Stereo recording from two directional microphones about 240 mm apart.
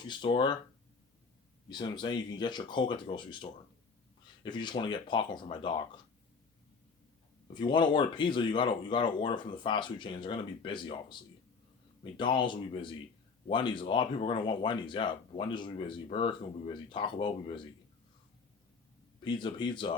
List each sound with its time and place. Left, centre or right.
0.1 s speech: centre
1.7 s speech: centre
7.5 s speech: centre
19.2 s speech: centre